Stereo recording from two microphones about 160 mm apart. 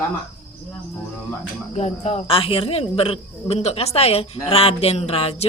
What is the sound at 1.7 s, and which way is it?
Speech, 40° left (ahead or behind).